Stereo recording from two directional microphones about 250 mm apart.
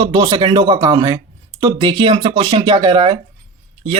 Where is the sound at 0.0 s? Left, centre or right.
Centre.